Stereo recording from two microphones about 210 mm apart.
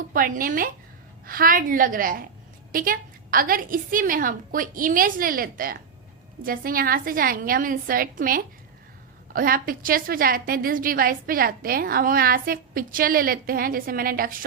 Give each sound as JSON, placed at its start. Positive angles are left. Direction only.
{"t": 0.1, "sound": "a woman's voice", "side_deg": -40}